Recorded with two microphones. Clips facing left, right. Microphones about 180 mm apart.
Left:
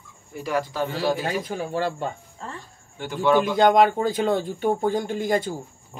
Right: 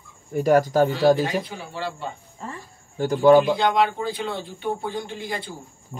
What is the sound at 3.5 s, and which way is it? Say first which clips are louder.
Speech: left 4 dB; 45° left (ahead or behind).